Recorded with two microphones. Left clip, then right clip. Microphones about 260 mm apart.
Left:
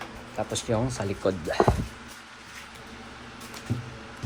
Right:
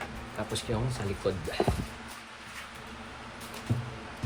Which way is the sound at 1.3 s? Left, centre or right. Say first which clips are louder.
Left 4 dB; left.